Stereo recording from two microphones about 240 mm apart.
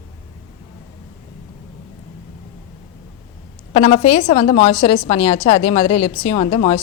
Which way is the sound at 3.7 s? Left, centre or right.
Left.